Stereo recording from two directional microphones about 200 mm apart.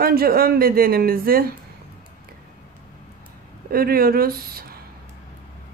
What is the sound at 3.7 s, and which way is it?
Speech, 50° right (ahead or behind).